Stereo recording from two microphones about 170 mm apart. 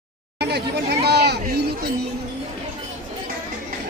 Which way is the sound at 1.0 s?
80° right.